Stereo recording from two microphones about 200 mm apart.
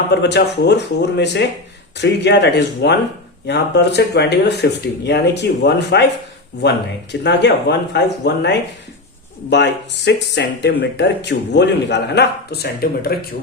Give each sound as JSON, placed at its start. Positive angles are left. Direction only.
{"t": 0.2, "sound": "speech", "side_deg": 60}